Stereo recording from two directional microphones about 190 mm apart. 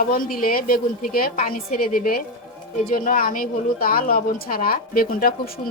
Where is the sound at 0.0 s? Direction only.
50° left (ahead or behind).